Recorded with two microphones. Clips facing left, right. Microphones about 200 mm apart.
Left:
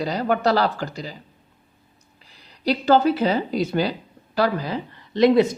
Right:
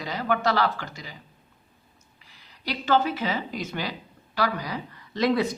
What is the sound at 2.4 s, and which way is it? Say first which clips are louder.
A woman's voice: left 10 dB; 35° left (ahead or behind).